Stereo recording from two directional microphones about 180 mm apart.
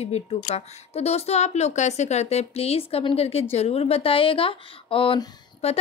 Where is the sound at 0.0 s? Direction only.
35° left (ahead or behind).